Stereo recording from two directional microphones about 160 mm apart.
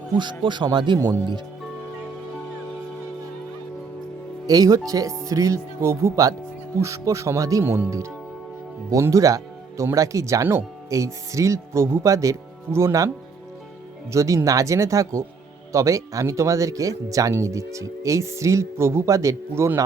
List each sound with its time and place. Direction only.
0.2 s speech: 30° right (ahead or behind)
4.4 s speech: 20° right (ahead or behind)
14.1 s speech: 20° right (ahead or behind)